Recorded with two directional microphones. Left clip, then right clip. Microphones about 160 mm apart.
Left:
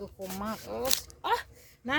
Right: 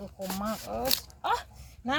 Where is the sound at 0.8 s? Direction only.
10° left (ahead or behind).